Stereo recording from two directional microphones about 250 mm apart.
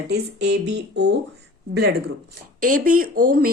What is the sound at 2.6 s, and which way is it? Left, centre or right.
Speech, right.